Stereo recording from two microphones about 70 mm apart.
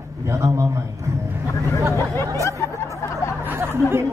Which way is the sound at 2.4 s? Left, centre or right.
Left.